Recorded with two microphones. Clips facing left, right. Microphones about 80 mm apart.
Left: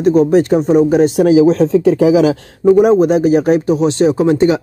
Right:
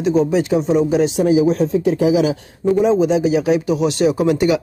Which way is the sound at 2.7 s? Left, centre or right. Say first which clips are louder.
Left 3 dB; left.